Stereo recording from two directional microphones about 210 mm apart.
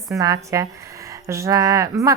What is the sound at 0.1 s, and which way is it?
A woman's voice, 15° right (ahead or behind).